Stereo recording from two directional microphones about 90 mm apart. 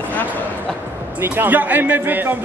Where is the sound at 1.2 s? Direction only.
20° right (ahead or behind).